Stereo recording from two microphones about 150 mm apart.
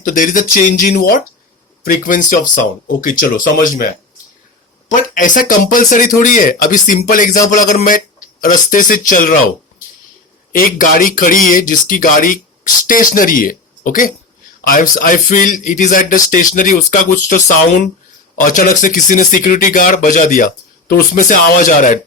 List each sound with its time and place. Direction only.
0.0 s speech: 65° left (ahead or behind); by 1.2 s 80° left
1.8 s speech: 65° left (ahead or behind)
4.9 s speech: 60° left (ahead or behind)
10.5 s speech: 70° left (ahead or behind)
18.3 s speech: 60° left (ahead or behind)